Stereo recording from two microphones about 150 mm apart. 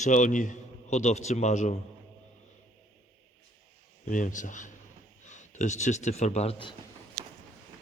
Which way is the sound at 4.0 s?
60° left (ahead or behind).